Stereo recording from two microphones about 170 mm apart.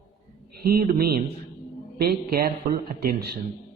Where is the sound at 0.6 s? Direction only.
65° right (ahead or behind).